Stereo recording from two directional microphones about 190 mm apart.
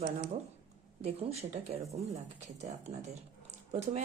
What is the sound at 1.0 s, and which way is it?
Speech, 35° right (ahead or behind).